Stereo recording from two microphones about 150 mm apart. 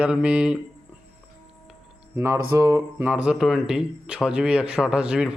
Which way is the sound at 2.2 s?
15° right (ahead or behind).